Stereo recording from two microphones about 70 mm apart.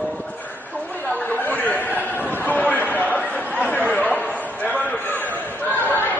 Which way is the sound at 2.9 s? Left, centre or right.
Left.